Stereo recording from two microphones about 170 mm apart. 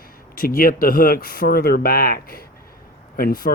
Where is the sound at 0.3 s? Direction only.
55° left (ahead or behind).